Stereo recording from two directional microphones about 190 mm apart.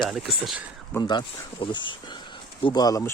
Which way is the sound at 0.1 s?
Centre (ahead or behind).